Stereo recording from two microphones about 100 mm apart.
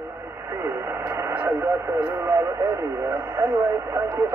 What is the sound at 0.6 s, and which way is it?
Radio, 25° right (ahead or behind).